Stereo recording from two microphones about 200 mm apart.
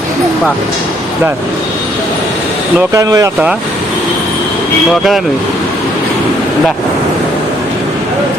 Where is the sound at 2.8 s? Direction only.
15° right (ahead or behind).